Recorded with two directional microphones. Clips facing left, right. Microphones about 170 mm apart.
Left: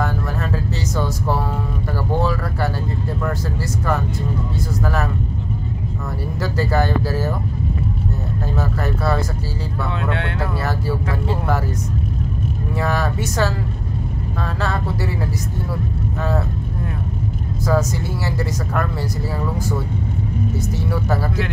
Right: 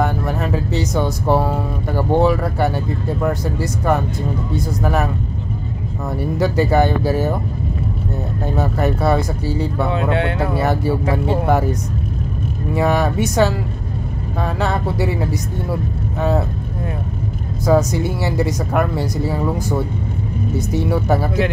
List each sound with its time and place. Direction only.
0.0 s speech: 15° right (ahead or behind)
6.4 s speech: 20° right (ahead or behind)
8.5 s speech: 20° right (ahead or behind)
12.7 s speech: 20° right (ahead or behind)
17.6 s speech: 15° right (ahead or behind)